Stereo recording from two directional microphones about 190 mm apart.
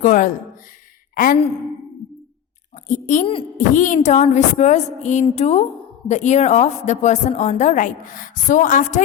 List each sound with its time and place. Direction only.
0.0 s a woman's voice: 40° left (ahead or behind)
2.8 s a woman's voice: 40° left (ahead or behind)